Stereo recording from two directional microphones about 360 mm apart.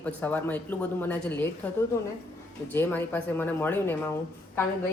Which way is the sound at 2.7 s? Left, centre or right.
Centre.